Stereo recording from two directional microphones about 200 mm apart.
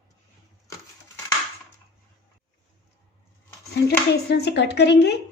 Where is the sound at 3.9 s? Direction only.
55° left (ahead or behind).